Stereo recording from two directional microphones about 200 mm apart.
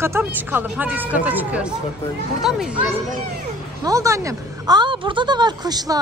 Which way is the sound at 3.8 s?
15° right (ahead or behind).